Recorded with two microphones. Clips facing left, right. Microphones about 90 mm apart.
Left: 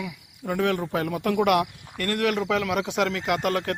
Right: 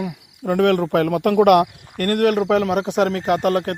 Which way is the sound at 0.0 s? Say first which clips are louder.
Right 7 dB; 50° right (ahead or behind).